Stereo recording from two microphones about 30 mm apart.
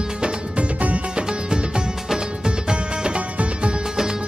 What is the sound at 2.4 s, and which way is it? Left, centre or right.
Music, right.